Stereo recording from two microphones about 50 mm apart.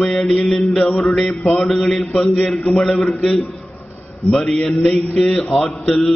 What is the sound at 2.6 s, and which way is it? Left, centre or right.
Mantra, centre.